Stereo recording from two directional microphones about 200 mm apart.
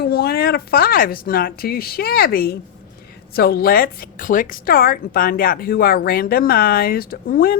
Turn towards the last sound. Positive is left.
turn(degrees=45)  # may be behind; listen again after turning